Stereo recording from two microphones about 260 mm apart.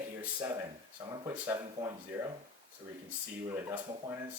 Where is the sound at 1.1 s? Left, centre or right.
Centre.